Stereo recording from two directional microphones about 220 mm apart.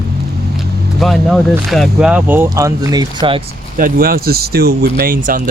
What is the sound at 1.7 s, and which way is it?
Speech, centre (ahead or behind).